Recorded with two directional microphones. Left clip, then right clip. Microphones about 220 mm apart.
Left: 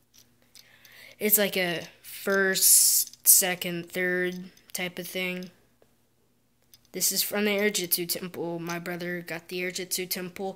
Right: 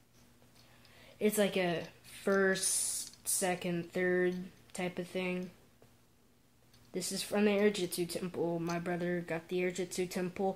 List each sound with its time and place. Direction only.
0.9 s speech: 15° left (ahead or behind)
6.9 s speech: 15° left (ahead or behind)